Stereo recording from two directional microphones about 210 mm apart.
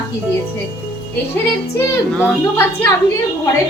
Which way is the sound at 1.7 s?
10° left (ahead or behind).